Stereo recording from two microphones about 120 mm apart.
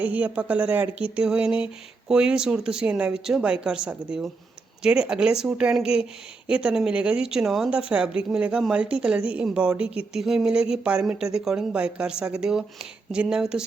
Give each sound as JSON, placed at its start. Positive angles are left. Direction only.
{"t": 0.0, "sound": "speech", "side_deg": -10}